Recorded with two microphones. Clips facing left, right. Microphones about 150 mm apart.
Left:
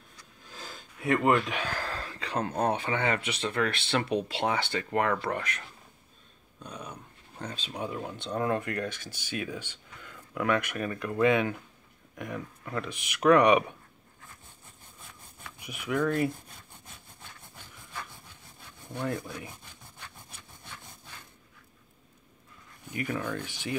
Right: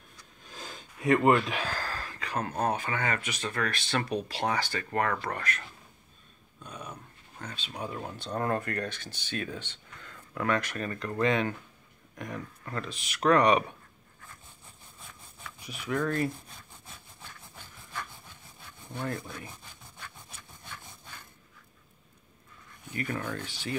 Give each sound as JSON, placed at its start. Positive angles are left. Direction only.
{"t": 0.6, "sound": "a sound", "side_deg": -15}
{"t": 1.2, "sound": "speech", "side_deg": -5}
{"t": 1.8, "sound": "a sound", "side_deg": 25}
{"t": 2.6, "sound": "speech", "side_deg": 25}
{"t": 7.3, "sound": "speech", "side_deg": 35}
{"t": 7.7, "sound": "speech", "side_deg": 20}
{"t": 8.0, "sound": "speech", "side_deg": 10}
{"t": 15.6, "sound": "speech", "side_deg": 15}
{"t": 19.0, "sound": "speech", "side_deg": 10}
{"t": 22.9, "sound": "speech", "side_deg": 15}